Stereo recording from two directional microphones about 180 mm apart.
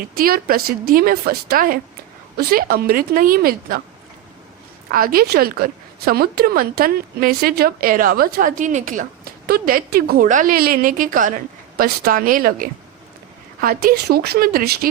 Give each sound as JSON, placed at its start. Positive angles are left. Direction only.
{"t": 0.1, "sound": "a woman's voice", "side_deg": -55}
{"t": 4.9, "sound": "a woman's voice", "side_deg": -55}